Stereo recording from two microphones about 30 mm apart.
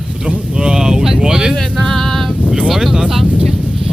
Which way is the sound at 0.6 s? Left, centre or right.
Right.